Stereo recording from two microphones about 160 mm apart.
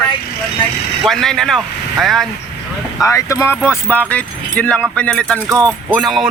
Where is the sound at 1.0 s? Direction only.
5° left (ahead or behind).